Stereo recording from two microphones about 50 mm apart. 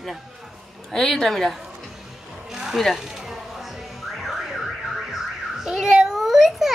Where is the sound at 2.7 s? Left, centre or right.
Centre.